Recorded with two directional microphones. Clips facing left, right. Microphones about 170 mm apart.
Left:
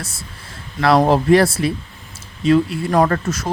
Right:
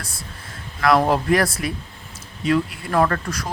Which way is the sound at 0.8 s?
25° left (ahead or behind).